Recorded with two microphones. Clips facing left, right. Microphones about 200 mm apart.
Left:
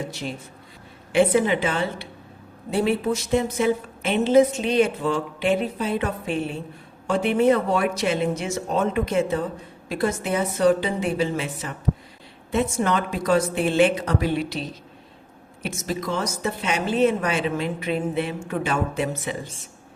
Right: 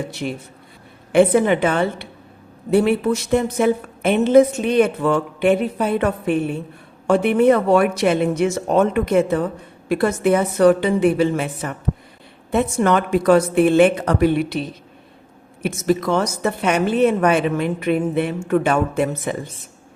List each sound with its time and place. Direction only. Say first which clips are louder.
0.1 s a woman's voice: right 5 dB; 60° right (ahead or behind)